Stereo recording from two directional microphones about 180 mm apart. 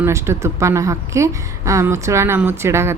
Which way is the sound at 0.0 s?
15° right (ahead or behind).